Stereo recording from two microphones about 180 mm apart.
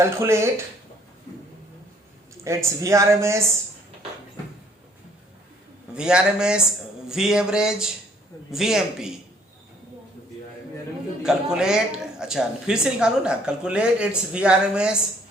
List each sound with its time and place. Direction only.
0.0 s speech: 15° right (ahead or behind)
2.4 s speech: 15° right (ahead or behind)
5.9 s speech: 5° right (ahead or behind)
11.2 s speech: 5° right (ahead or behind)